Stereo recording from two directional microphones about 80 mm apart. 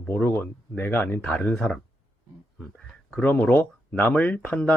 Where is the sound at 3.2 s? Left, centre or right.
Centre.